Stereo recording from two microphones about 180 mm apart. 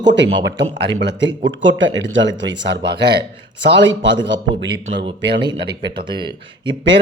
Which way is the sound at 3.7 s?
90° right.